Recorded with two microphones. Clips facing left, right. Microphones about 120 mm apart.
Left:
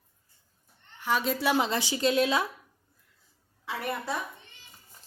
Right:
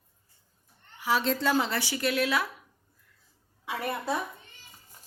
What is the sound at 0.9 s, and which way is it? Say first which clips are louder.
Speech: right 1 dB; 5° right (ahead or behind).